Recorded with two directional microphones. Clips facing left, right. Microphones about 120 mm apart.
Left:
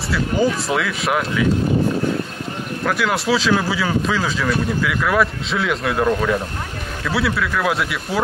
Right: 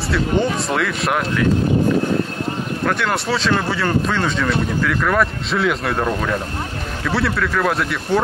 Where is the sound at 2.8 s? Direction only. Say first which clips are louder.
Left 2 dB; centre (ahead or behind).